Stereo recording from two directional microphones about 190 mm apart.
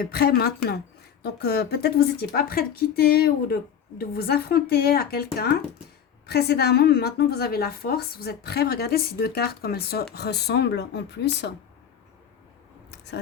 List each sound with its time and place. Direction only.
0.0 s a woman's voice: 55° left (ahead or behind)